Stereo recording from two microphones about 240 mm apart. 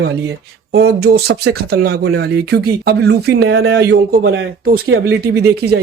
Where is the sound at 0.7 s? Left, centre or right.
Right.